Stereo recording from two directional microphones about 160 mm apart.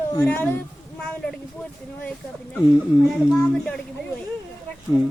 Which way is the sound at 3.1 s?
5° left (ahead or behind).